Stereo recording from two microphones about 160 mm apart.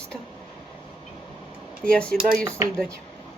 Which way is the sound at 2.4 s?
15° right (ahead or behind).